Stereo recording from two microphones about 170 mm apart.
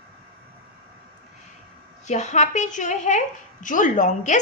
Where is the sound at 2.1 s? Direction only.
45° left (ahead or behind).